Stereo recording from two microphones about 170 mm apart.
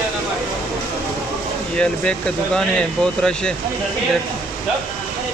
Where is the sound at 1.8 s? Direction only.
5° left (ahead or behind).